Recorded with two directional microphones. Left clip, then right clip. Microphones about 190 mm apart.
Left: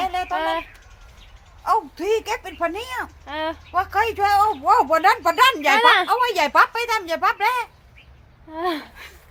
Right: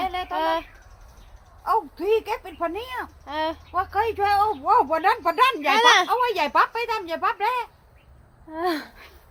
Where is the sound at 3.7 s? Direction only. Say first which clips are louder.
Left 4 dB; 35° left (ahead or behind).